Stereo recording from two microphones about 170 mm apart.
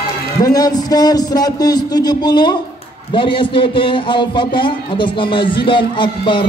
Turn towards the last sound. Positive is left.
turn(degrees=30)  # may be behind; listen again after turning